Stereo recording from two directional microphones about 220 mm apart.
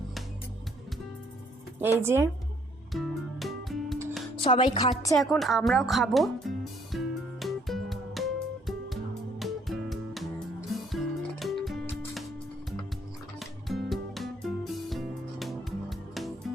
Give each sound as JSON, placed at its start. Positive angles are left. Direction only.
{"t": 1.8, "sound": "speech", "side_deg": -10}
{"t": 2.9, "sound": "music", "side_deg": 0}
{"t": 4.4, "sound": "a woman's voice", "side_deg": 25}
{"t": 5.1, "sound": "speech", "side_deg": 0}
{"t": 6.9, "sound": "music", "side_deg": 0}
{"t": 9.4, "sound": "music", "side_deg": 0}
{"t": 13.4, "sound": "music", "side_deg": 0}